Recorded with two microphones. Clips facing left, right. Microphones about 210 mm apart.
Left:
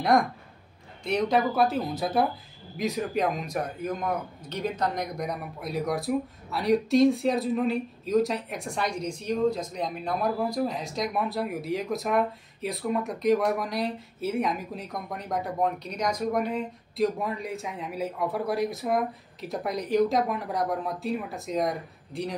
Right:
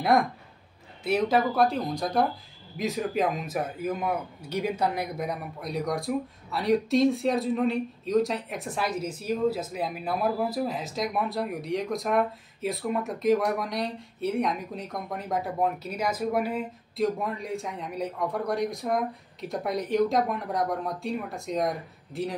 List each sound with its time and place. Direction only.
1.0 s a man's voice: 5° right (ahead or behind)